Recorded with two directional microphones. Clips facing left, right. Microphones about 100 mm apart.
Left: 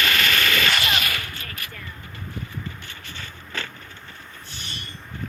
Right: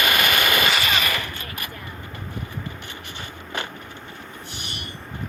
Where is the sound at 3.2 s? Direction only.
15° right (ahead or behind).